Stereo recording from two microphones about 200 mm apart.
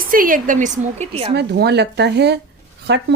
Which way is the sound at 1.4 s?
55° right (ahead or behind).